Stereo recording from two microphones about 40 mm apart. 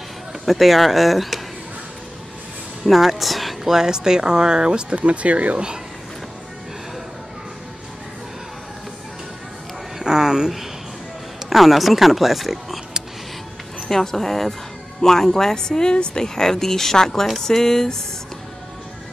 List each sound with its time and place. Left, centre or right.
0.5 s speech: centre
2.8 s speech: centre
3.7 s speech: centre
5.0 s speech: right
9.9 s a sound: centre
11.4 s speech: centre
13.7 s speech: centre